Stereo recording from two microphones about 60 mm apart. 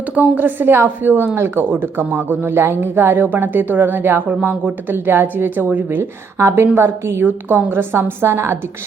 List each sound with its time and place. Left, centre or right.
0.2 s speech: right
6.0 s a woman's voice: right